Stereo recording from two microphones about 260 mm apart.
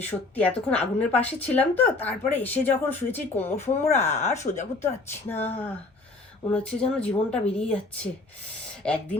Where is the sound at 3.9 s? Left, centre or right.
Left.